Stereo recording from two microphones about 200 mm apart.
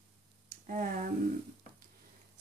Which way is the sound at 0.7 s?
40° right (ahead or behind).